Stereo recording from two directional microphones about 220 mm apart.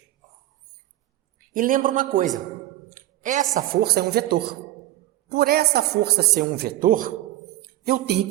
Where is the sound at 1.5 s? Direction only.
40° right (ahead or behind).